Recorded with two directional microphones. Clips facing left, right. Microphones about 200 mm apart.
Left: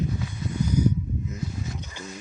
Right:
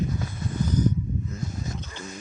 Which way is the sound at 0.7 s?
10° left (ahead or behind).